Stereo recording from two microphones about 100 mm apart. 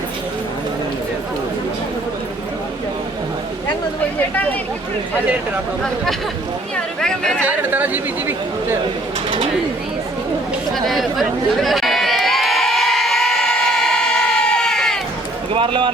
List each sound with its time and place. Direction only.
6.7 s speech: 5° left (ahead or behind)
7.4 s speech: 20° right (ahead or behind)
10.8 s crowd: centre (ahead or behind)
15.5 s speech: 55° right (ahead or behind)